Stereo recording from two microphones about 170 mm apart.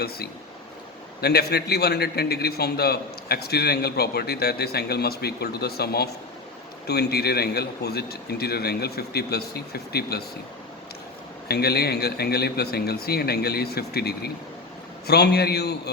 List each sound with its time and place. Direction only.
1.2 s a man's voice: 70° left (ahead or behind)
11.4 s a man's voice: 70° left (ahead or behind)